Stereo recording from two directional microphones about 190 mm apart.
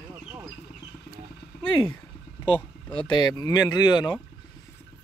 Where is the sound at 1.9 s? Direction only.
10° left (ahead or behind).